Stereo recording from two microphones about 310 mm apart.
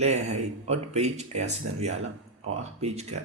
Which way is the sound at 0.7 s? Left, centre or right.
Right.